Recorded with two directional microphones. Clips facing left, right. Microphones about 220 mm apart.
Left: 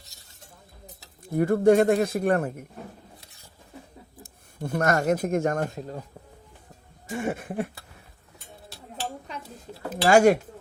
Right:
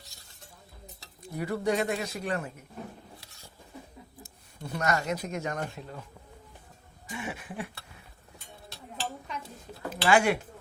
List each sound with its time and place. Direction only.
1.4 s a man's voice: 50° left (ahead or behind)
4.2 s speech: 50° left (ahead or behind)
7.1 s a man's voice: 50° left (ahead or behind)
9.9 s speech: 45° left (ahead or behind)